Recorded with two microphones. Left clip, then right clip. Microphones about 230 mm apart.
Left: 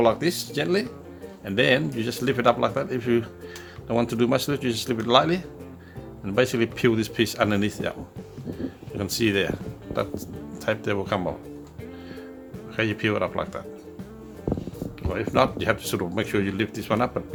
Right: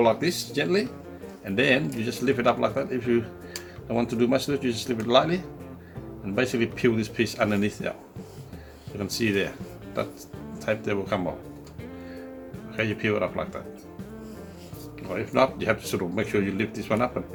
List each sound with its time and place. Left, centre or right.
0.0 s speech: left
9.0 s speech: left
10.7 s speech: left
12.7 s speech: left
15.0 s speech: left